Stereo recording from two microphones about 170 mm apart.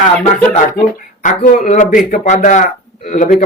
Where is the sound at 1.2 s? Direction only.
50° left (ahead or behind).